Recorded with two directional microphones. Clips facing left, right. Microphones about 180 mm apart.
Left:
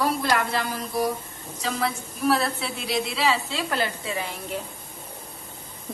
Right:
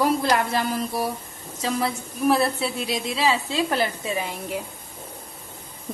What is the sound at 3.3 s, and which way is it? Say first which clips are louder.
Speech: right 3 dB; 15° right (ahead or behind).